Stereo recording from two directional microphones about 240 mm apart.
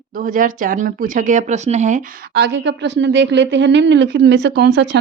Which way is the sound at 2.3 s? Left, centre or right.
Right.